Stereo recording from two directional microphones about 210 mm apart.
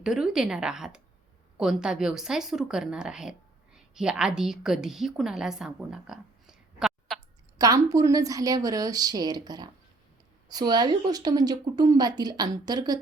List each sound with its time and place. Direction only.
0.0 s a woman's voice: 5° right (ahead or behind)
7.6 s a woman's voice: 15° right (ahead or behind)